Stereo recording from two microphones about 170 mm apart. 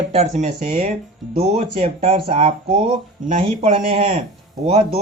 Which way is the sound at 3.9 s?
30° right (ahead or behind).